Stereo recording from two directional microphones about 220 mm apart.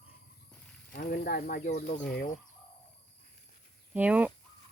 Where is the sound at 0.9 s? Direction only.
40° left (ahead or behind).